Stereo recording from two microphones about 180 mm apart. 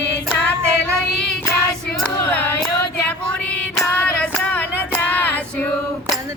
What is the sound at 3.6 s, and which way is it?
Child singing, 5° left (ahead or behind).